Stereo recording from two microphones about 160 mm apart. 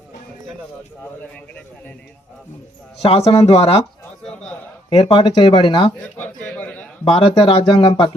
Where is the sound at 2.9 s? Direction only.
40° left (ahead or behind).